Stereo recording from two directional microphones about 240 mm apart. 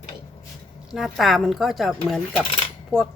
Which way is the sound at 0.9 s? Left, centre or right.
Centre.